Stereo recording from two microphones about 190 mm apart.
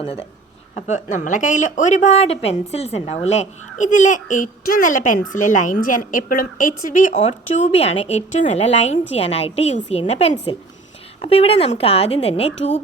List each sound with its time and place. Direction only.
0.0 s a woman's voice: 30° left (ahead or behind)